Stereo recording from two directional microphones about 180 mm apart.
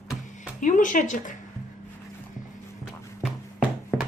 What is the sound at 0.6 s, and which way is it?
Speech, 45° left (ahead or behind).